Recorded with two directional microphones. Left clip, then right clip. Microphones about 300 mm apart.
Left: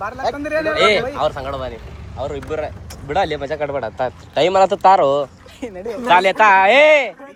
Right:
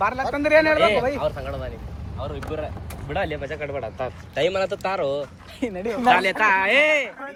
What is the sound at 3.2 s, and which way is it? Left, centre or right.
Speech, left.